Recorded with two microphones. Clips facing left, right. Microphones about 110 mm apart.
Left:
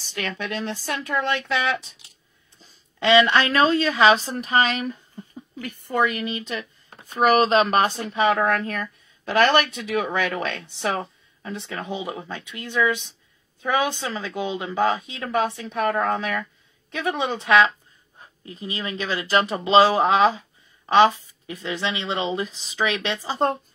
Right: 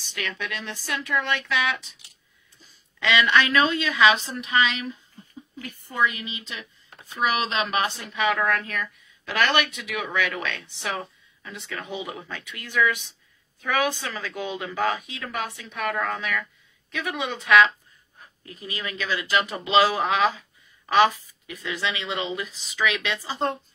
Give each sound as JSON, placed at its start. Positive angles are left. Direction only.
{"t": 0.0, "sound": "speech", "side_deg": 40}